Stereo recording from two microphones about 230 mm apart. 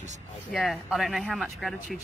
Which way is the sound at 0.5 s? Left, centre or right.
Centre.